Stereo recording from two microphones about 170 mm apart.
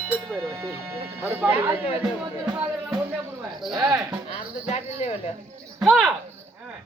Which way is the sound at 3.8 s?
10° right (ahead or behind).